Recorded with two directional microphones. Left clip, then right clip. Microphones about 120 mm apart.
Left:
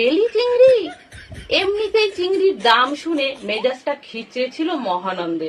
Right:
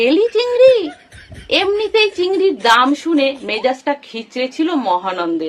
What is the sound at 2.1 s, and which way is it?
Speech, 20° right (ahead or behind).